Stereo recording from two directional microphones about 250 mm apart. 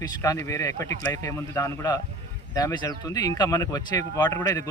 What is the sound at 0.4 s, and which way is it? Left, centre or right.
Speech, centre.